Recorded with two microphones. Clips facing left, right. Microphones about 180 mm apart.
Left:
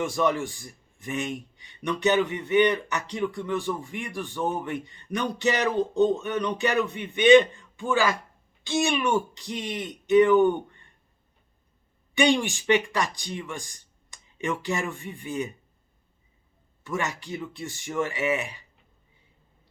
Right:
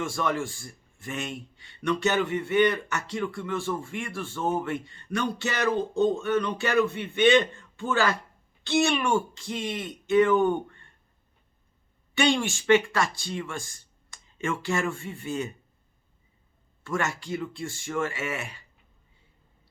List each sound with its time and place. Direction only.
0.0 s speech: 20° left (ahead or behind)
12.1 s speech: 15° left (ahead or behind)
16.8 s speech: 15° left (ahead or behind)